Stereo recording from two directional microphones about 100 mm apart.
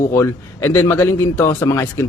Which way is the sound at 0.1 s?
25° left (ahead or behind).